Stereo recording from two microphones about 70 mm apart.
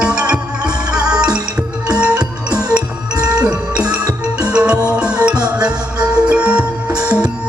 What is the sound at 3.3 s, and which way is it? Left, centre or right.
Music, centre.